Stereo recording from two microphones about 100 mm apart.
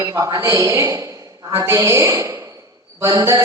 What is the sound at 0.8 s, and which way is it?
A man's voice, 35° right (ahead or behind).